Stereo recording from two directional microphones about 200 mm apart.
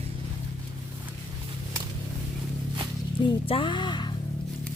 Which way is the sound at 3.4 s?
25° left (ahead or behind).